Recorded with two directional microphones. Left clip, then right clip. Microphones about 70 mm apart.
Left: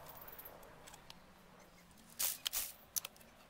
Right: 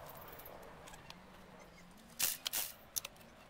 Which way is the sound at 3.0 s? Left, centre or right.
Centre.